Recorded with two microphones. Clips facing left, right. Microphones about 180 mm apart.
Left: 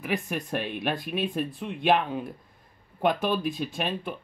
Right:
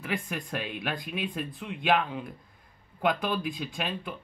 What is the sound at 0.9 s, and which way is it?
Speech, 20° right (ahead or behind).